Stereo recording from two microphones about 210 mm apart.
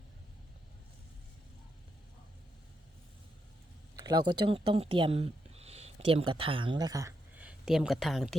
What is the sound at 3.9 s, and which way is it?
Speech, 20° right (ahead or behind).